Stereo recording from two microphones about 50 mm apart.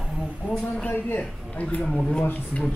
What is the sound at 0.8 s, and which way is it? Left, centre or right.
Speech, left.